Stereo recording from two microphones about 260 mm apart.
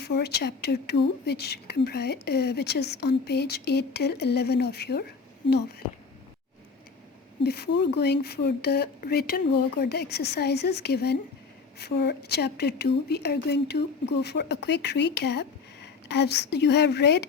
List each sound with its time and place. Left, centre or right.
0.0 s a woman's voice: left
7.4 s a woman's voice: left